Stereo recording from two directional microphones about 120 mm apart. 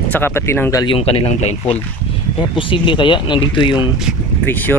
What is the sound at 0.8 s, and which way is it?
Speech, 55° left (ahead or behind).